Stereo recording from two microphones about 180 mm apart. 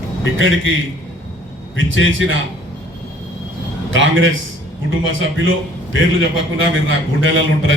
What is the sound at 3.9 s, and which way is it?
Music, 90° right.